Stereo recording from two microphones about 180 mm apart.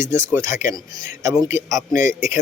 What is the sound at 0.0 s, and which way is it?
Speech, 15° right (ahead or behind).